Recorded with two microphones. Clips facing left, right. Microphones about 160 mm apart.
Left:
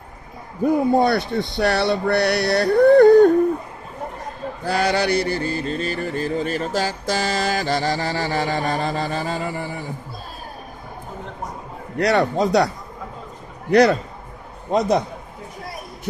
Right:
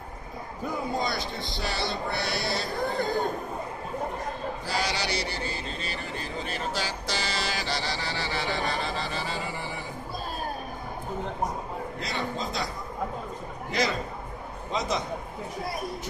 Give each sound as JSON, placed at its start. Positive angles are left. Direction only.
{"t": 0.9, "sound": "speech", "side_deg": 65}
{"t": 4.6, "sound": "mantra", "side_deg": 55}
{"t": 12.0, "sound": "a man's voice", "side_deg": 75}